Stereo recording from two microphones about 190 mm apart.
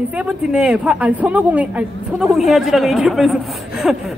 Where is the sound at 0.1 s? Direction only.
5° right (ahead or behind).